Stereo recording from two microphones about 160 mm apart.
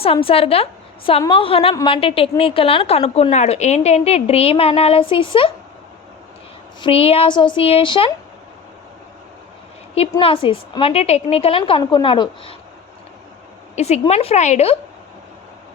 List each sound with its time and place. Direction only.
0.0 s a woman's voice: 35° left (ahead or behind)
6.8 s a woman's voice: 35° left (ahead or behind)
9.9 s a woman's voice: 35° left (ahead or behind)
13.7 s a woman's voice: 45° left (ahead or behind)